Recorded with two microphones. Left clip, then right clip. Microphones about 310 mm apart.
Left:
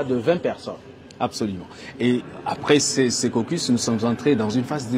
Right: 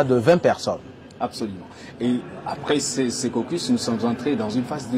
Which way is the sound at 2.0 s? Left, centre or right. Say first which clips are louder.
Left 3 dB; left.